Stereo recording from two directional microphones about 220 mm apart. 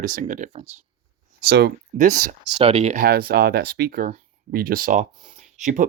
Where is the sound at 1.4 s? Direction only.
45° right (ahead or behind).